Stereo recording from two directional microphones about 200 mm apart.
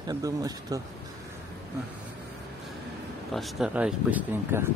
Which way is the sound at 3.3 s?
Centre (ahead or behind).